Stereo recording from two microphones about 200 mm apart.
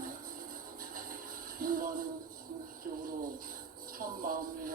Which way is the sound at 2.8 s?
45° right (ahead or behind).